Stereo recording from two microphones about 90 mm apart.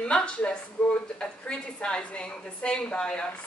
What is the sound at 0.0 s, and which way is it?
A woman's voice, 10° left (ahead or behind).